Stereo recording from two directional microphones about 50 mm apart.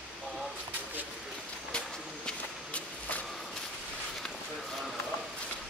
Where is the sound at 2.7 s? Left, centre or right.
Left.